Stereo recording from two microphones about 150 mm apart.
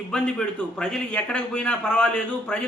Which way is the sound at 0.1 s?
5° left (ahead or behind).